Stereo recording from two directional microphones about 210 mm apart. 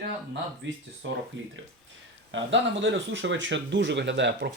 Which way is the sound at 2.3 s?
60° right (ahead or behind).